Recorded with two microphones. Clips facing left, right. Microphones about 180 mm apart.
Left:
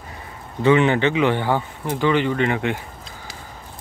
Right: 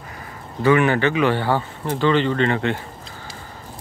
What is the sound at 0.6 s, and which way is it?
Speech, 20° left (ahead or behind).